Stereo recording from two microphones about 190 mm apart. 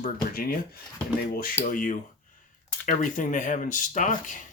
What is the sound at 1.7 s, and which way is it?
Speech, 45° left (ahead or behind).